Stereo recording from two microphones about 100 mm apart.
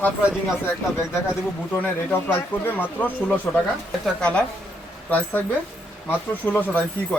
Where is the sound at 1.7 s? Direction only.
15° left (ahead or behind).